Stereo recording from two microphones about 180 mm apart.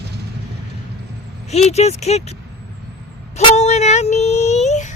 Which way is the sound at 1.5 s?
35° left (ahead or behind).